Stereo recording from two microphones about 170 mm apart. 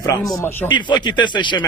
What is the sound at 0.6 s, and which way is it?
Speech, 25° left (ahead or behind).